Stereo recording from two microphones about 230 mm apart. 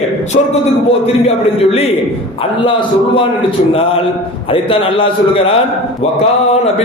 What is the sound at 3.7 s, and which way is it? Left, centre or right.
A man's voice, left.